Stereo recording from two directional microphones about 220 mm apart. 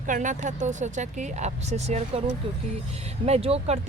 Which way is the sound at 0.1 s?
35° right (ahead or behind).